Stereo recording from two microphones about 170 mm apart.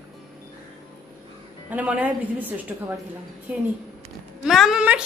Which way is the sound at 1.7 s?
10° right (ahead or behind).